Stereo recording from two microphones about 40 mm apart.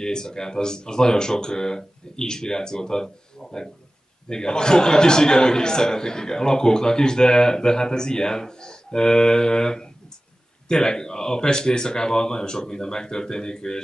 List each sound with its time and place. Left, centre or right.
0.0 s a man's voice: centre